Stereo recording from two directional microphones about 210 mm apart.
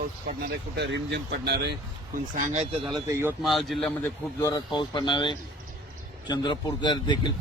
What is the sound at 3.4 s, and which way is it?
Speech, centre (ahead or behind).